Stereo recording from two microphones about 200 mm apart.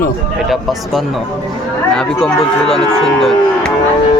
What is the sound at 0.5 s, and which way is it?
Speech, centre (ahead or behind).